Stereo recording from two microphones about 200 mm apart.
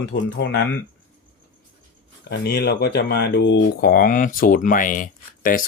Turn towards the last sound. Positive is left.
turn(degrees=45)  # may be behind; listen again after turning